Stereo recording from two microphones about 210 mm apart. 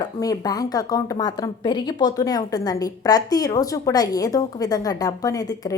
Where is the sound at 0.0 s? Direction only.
15° left (ahead or behind).